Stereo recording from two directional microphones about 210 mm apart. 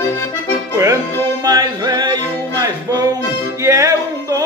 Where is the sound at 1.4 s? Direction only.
20° right (ahead or behind).